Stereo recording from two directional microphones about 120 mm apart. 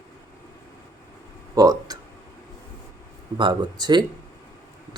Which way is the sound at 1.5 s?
30° right (ahead or behind).